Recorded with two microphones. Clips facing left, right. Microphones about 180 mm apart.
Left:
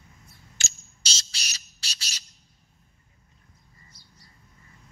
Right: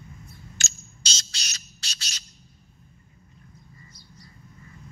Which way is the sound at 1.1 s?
30° left (ahead or behind).